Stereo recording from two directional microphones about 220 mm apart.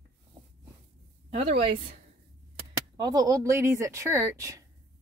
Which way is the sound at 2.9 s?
20° right (ahead or behind).